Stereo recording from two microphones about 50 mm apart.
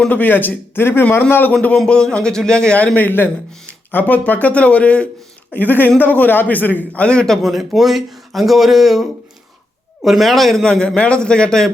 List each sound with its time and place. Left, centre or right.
0.1 s a man's voice: left
1.7 s a man's voice: centre
2.9 s a man's voice: left
3.7 s a sound: left
4.3 s speech: left
5.5 s a man's voice: left
7.0 s speech: centre
7.4 s speech: centre
10.6 s a man's voice: centre